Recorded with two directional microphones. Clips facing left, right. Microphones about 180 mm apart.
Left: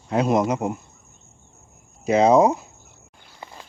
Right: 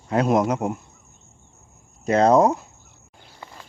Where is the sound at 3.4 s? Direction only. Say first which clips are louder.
Left 2 dB; 15° left (ahead or behind).